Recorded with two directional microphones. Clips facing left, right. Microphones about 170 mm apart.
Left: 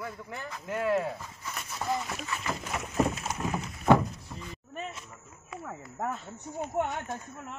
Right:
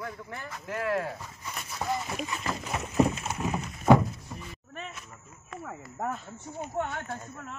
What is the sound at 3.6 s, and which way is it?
Thunk, 5° right (ahead or behind).